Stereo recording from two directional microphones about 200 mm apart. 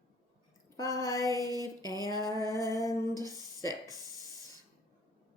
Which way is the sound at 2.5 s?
15° left (ahead or behind).